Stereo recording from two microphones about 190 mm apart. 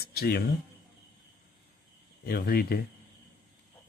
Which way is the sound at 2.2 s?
50° left (ahead or behind).